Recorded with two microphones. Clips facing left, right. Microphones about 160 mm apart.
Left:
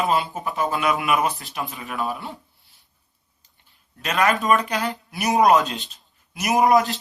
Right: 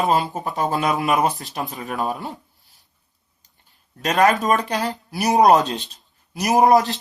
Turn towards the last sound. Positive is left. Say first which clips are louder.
# right 2 dB
turn(degrees=-40)  # may be behind; listen again after turning